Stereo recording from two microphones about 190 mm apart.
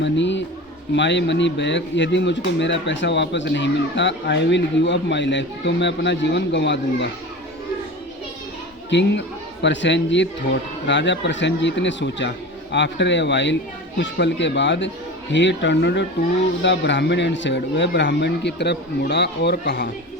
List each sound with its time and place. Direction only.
0.0 s a sound: 70° left (ahead or behind)
0.9 s speech: 70° left (ahead or behind)
8.9 s a man's voice: 70° left (ahead or behind)